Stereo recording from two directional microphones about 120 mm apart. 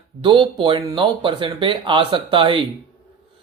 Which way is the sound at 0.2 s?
45° right (ahead or behind).